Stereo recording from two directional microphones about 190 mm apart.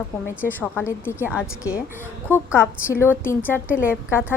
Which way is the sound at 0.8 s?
10° left (ahead or behind).